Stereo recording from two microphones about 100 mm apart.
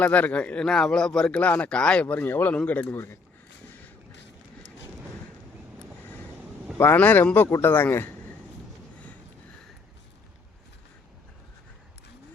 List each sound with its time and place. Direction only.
0.0 s a man's voice: 15° left (ahead or behind)
3.7 s a sound: 15° left (ahead or behind)
6.7 s speech: 20° left (ahead or behind)